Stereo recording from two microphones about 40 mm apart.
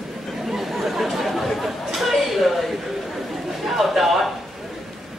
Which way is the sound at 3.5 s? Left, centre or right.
Centre.